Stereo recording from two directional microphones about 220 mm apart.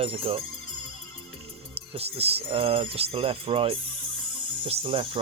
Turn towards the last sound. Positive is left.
turn(degrees=-25)  # may be behind; listen again after turning